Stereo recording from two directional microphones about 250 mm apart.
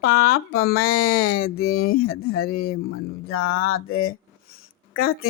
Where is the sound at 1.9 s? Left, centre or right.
Left.